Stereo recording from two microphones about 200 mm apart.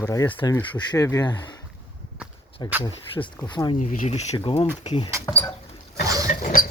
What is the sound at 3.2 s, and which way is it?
Speech, 10° left (ahead or behind).